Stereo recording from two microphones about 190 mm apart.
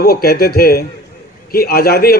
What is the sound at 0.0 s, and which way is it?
A man's voice, 55° left (ahead or behind).